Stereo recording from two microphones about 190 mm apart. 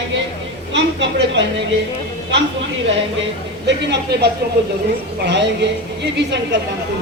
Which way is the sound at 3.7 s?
65° right (ahead or behind).